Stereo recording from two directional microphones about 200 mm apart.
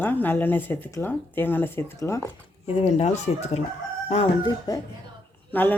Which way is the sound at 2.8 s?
35° left (ahead or behind).